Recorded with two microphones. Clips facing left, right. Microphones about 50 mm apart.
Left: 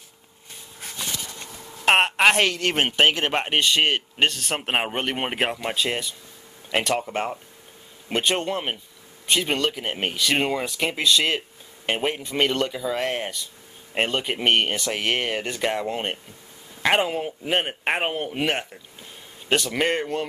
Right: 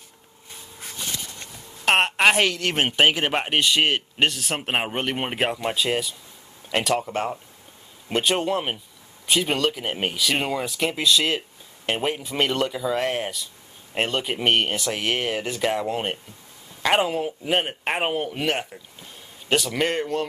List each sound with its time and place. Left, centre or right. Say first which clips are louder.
1.9 s a woman's voice: left 1 dB; centre
18.3 s speech: even; centre
19.5 s speech: even; centre